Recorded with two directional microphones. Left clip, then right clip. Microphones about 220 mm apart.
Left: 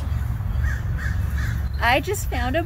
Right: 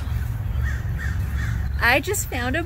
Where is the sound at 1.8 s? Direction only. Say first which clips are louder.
Right 1 dB; 30° right (ahead or behind).